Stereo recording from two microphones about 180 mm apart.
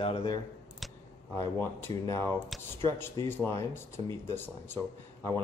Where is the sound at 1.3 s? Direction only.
15° left (ahead or behind).